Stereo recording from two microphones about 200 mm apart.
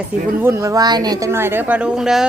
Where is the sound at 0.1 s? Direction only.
5° right (ahead or behind).